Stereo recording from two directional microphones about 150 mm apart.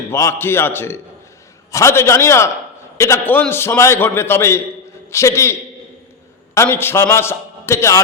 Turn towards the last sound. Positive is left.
turn(degrees=20)  # may be behind; listen again after turning